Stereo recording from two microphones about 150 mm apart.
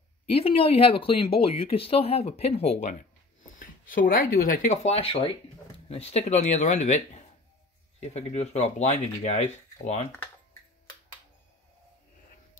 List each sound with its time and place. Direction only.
0.3 s speech: 40° left (ahead or behind)
3.5 s speech: 65° left (ahead or behind)
4.8 s speech: 40° left (ahead or behind)
8.0 s speech: 45° left (ahead or behind)